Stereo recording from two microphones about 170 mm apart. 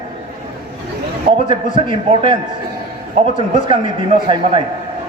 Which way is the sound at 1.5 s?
30° right (ahead or behind).